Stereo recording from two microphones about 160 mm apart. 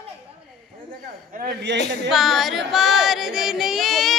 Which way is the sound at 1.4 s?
80° right.